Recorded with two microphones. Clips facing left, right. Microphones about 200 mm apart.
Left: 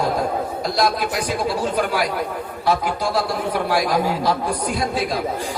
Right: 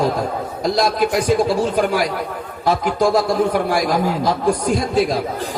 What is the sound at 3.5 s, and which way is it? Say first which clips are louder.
Speech: right 2 dB; 45° right (ahead or behind).